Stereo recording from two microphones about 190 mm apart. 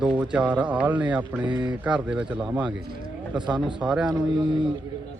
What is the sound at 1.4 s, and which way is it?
Speech, 25° right (ahead or behind).